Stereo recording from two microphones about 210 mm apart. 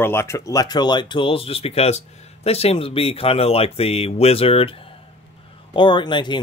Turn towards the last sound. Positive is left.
turn(degrees=20)  # may be behind; listen again after turning